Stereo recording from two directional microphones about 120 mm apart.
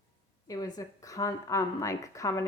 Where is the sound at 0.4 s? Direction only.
30° left (ahead or behind).